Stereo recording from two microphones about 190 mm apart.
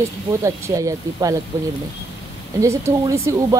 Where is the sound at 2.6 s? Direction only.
15° right (ahead or behind).